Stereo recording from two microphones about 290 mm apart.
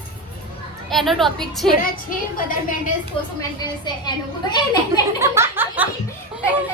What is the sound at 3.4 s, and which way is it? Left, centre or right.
A woman's voice, centre.